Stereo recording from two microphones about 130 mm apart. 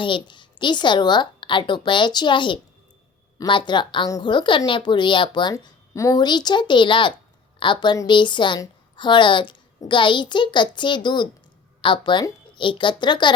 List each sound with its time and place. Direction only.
0.0 s a woman's voice: 40° left (ahead or behind)